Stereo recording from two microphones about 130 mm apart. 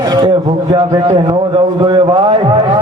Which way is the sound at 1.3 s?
35° right (ahead or behind).